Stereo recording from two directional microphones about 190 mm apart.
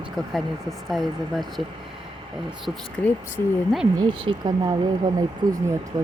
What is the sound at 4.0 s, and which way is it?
Speech, 25° right (ahead or behind).